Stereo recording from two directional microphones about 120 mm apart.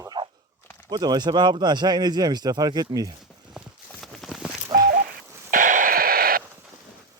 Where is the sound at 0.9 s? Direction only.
35° right (ahead or behind).